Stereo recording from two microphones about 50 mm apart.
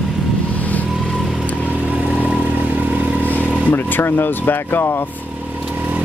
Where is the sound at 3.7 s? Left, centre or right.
Left.